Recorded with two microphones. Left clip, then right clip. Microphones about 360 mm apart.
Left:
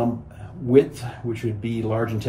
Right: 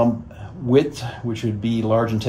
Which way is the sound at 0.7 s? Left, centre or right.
Centre.